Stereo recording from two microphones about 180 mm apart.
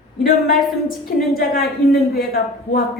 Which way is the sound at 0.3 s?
55° left (ahead or behind).